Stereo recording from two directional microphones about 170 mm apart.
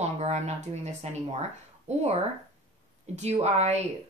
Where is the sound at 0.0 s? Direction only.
40° right (ahead or behind).